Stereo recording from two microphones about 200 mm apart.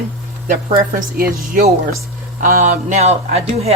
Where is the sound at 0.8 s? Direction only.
45° right (ahead or behind).